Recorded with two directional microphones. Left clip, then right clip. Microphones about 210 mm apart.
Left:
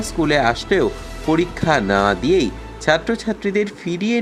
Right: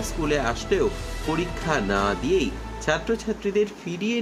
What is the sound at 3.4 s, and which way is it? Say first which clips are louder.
Speech: left 3 dB; 15° right (ahead or behind).